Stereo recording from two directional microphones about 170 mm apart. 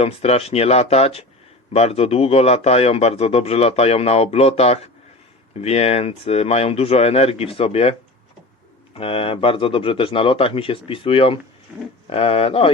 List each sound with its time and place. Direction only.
0.0 s a man's voice: 35° left (ahead or behind)
9.0 s a man's voice: 35° left (ahead or behind)